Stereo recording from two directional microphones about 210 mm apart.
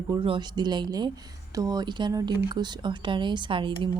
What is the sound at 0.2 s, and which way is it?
Speech, 20° right (ahead or behind).